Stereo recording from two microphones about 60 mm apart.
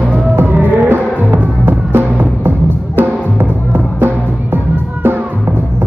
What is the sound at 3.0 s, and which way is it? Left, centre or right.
Music, right.